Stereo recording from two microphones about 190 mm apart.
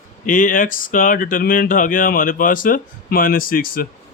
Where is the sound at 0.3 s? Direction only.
45° left (ahead or behind).